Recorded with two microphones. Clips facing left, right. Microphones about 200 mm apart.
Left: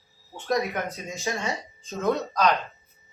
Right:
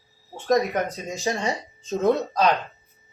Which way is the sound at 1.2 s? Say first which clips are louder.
Right 4 dB; 30° right (ahead or behind).